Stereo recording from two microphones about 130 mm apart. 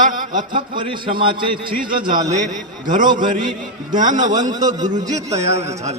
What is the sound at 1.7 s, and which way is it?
A man's voice, 90° right.